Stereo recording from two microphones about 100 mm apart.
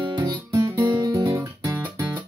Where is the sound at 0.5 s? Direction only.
30° right (ahead or behind).